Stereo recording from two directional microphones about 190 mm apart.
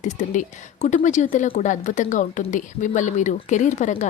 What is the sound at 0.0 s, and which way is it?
Speech, 40° left (ahead or behind).